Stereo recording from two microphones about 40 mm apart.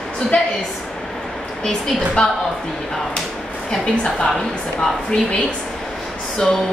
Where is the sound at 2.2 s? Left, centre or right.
Left.